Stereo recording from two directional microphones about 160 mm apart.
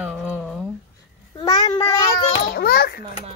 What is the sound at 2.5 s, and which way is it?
Children playing, 75° left (ahead or behind).